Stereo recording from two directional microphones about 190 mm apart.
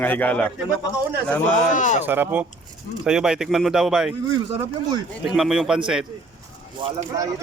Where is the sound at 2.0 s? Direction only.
10° right (ahead or behind).